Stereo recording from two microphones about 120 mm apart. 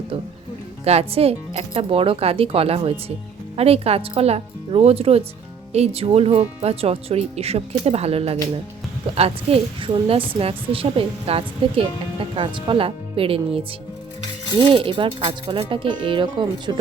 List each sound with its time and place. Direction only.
0.9 s speech: 60° right (ahead or behind)
14.7 s speech: 45° right (ahead or behind)